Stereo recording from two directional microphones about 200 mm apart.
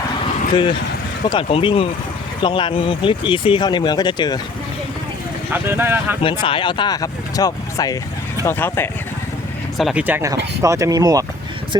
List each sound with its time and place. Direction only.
0.5 s speech: 25° left (ahead or behind)
5.5 s speech: 10° right (ahead or behind)
6.2 s speech: 25° left (ahead or behind)
9.7 s speech: 5° right (ahead or behind)